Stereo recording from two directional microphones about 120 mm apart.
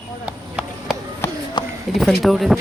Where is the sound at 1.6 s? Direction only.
40° left (ahead or behind).